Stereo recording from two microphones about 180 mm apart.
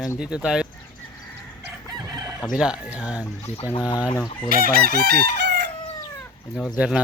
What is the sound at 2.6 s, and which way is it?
Speech, 5° right (ahead or behind).